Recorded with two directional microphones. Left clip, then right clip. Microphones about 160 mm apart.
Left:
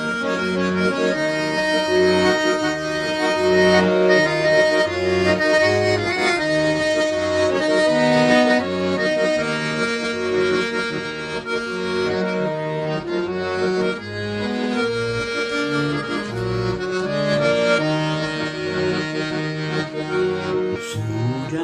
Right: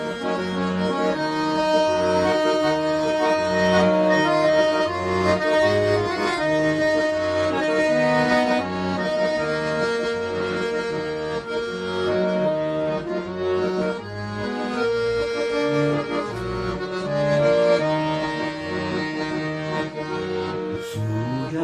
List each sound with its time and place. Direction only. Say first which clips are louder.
0.8 s accordion: left 1 dB; 40° left (ahead or behind)
6.9 s music: left 2 dB; 35° left (ahead or behind)
15.5 s music: right 2 dB; 35° left (ahead or behind)
17.2 s accordion: right 1 dB; 35° left (ahead or behind)